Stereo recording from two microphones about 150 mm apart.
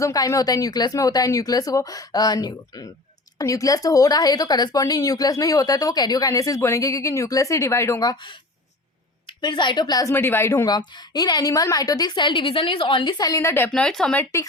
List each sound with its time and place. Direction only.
0.0 s speech: 20° left (ahead or behind)
9.2 s speech: 30° left (ahead or behind)
10.8 s speech: 30° left (ahead or behind); by 14.3 s 5° left (ahead or behind)